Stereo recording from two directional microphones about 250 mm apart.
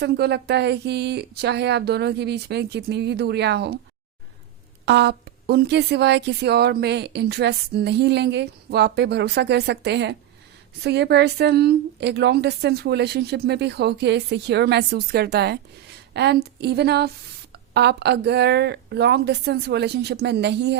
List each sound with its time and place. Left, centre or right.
0.0 s a woman's voice: right
4.9 s a woman's voice: right